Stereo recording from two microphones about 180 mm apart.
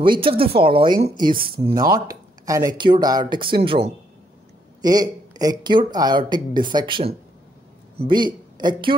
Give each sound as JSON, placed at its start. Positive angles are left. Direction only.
{"t": 0.0, "sound": "a man's voice", "side_deg": -30}